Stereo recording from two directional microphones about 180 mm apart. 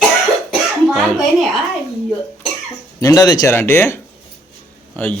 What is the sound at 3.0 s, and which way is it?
Speech, 20° left (ahead or behind).